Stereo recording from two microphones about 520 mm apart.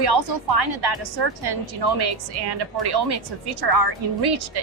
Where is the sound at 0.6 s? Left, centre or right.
Right.